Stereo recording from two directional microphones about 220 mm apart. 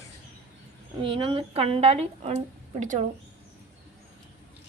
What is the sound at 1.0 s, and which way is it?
A woman's voice, 25° right (ahead or behind).